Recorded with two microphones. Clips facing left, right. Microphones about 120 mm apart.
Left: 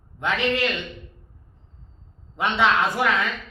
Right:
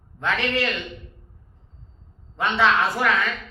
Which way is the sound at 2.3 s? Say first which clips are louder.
Even; 15° left (ahead or behind).